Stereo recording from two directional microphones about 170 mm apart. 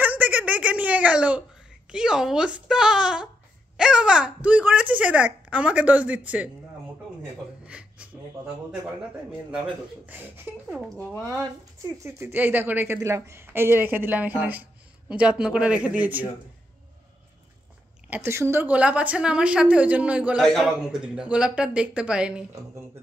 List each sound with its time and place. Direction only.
0.0 s a woman's voice: 10° right (ahead or behind)
7.6 s a sound: 5° right (ahead or behind)
10.0 s a woman's voice: 10° right (ahead or behind)
12.0 s a woman's voice: 15° right (ahead or behind)
18.1 s a woman's voice: 15° right (ahead or behind)